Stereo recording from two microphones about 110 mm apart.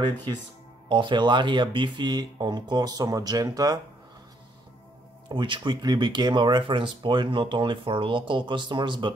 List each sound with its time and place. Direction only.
0.8 s speech: 45° right (ahead or behind)
5.3 s speech: 50° right (ahead or behind)